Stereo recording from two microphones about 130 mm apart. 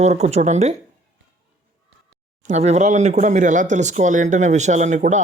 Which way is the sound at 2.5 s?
60° right (ahead or behind).